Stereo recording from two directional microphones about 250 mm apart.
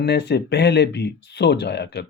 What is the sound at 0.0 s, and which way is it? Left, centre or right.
Speech, left.